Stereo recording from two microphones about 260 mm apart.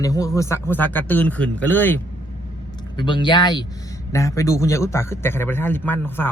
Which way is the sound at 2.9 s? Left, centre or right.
Centre.